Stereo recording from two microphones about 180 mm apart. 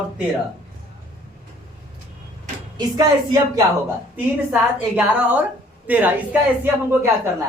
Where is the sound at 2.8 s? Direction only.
20° right (ahead or behind).